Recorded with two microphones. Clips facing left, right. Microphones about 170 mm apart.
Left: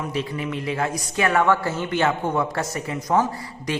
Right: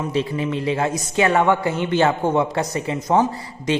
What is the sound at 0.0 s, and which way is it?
A man's voice, 25° right (ahead or behind).